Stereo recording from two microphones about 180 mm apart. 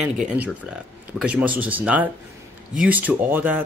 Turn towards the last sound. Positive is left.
turn(degrees=-10)  # may be behind; listen again after turning